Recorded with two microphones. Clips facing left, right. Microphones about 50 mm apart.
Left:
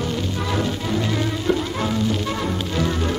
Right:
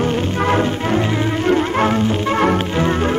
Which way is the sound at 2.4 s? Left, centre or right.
Right.